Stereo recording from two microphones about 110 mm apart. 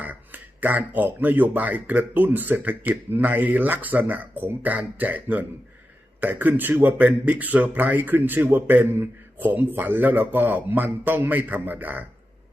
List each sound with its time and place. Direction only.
0.0 s speech: 15° right (ahead or behind)